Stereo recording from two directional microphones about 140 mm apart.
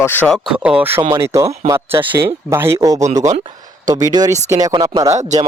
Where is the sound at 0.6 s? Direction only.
10° right (ahead or behind); by 4.8 s 30° right (ahead or behind).